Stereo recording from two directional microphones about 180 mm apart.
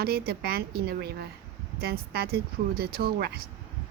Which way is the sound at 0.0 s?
60° right (ahead or behind).